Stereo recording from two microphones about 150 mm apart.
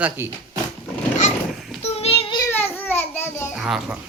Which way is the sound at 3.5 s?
5° right (ahead or behind).